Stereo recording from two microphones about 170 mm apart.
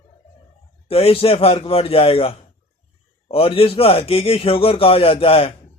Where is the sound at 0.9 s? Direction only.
35° left (ahead or behind).